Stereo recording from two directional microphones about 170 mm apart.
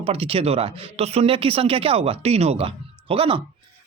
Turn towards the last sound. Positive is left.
turn(degrees=-30)  # may be behind; listen again after turning